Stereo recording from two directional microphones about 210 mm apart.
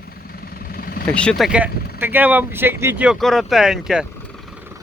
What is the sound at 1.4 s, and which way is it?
Speech, 5° right (ahead or behind).